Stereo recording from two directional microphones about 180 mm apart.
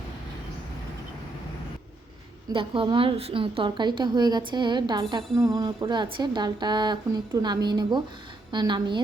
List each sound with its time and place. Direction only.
2.5 s a woman's voice: 30° right (ahead or behind)